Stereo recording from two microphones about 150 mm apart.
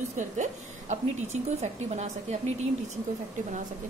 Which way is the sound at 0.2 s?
55° right (ahead or behind).